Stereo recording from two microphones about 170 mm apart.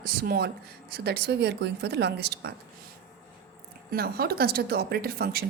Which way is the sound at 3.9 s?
65° right (ahead or behind).